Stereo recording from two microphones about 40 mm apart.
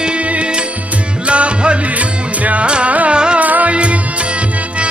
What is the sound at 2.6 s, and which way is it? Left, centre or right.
Carnatic music, right.